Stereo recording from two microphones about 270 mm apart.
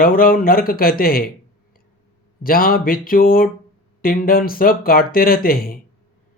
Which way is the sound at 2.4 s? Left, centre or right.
Left.